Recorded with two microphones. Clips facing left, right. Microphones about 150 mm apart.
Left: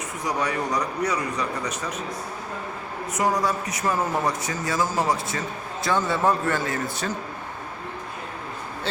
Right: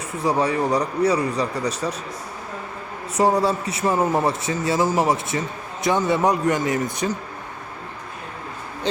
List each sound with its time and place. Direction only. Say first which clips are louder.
0.2 s speech: right 6 dB; 30° right (ahead or behind)
3.2 s a man's voice: right 5 dB; 30° right (ahead or behind)